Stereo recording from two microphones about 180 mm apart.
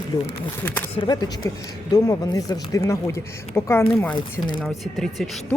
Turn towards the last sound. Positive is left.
turn(degrees=0)  # may be behind; listen again after turning